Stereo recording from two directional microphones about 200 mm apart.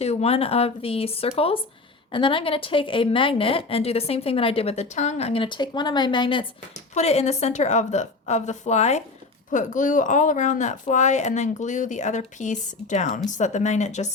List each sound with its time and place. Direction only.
0.0 s a woman's voice: 30° left (ahead or behind)